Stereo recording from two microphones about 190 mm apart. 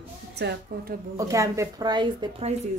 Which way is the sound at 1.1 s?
15° right (ahead or behind).